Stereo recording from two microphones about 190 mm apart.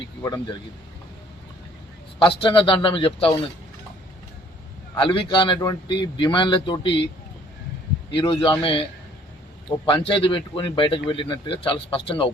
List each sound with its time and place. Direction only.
0.2 s speech: 15° left (ahead or behind)
2.1 s a man's voice: 25° left (ahead or behind)
4.9 s a man's voice: 30° left (ahead or behind)
8.1 s a man's voice: 25° left (ahead or behind)